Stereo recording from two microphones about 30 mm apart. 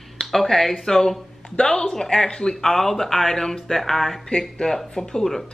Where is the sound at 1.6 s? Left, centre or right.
Left.